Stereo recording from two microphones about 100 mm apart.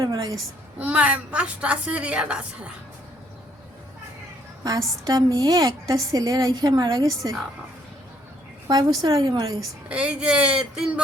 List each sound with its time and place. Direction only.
0.0 s a woman's voice: 35° right (ahead or behind)
0.8 s a woman's voice: 15° right (ahead or behind)
4.6 s a woman's voice: 40° right (ahead or behind)
8.6 s a woman's voice: 45° right (ahead or behind)
9.9 s a woman's voice: 10° right (ahead or behind)